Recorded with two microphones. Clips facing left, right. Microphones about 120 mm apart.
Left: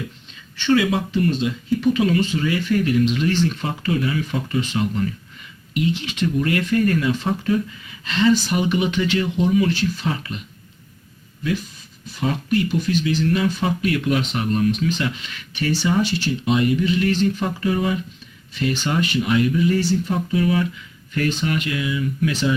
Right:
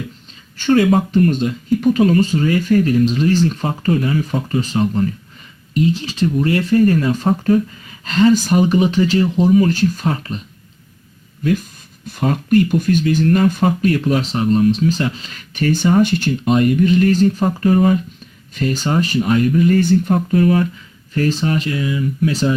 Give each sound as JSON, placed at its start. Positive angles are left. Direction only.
{"t": 0.5, "sound": "speech", "side_deg": -45}
{"t": 12.0, "sound": "speech", "side_deg": -50}
{"t": 21.1, "sound": "speech", "side_deg": -35}